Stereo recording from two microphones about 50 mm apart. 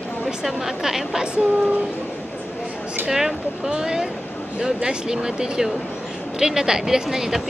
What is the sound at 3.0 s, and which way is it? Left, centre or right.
Speech, centre.